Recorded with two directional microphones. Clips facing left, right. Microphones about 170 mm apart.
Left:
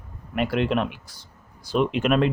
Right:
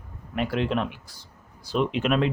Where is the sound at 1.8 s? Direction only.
50° left (ahead or behind).